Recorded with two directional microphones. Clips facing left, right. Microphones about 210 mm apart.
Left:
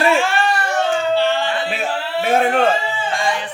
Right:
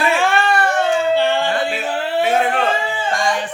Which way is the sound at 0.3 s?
55° right (ahead or behind).